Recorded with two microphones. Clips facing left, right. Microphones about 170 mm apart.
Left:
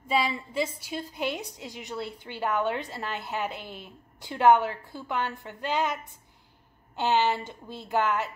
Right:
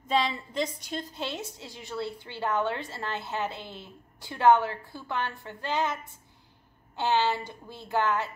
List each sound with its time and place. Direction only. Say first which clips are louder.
0.1 s a woman's voice: even; 10° left (ahead or behind)